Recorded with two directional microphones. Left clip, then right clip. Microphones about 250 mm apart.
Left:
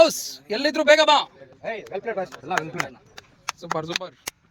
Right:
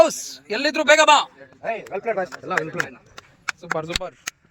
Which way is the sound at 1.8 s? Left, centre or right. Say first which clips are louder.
Right 3 dB; centre.